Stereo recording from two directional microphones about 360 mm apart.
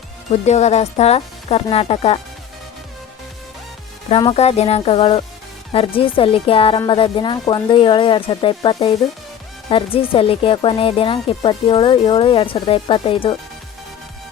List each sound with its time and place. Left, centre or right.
0.4 s speech: centre
4.1 s speech: centre